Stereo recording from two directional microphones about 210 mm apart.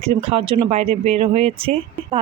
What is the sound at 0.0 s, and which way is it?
A woman's voice, 30° right (ahead or behind).